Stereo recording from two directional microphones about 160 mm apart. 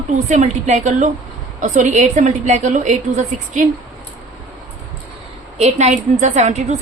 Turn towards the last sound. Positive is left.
turn(degrees=-45)  # may be behind; listen again after turning